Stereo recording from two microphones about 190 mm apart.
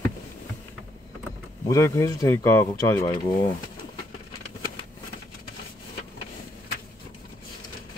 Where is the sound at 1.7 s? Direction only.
15° left (ahead or behind).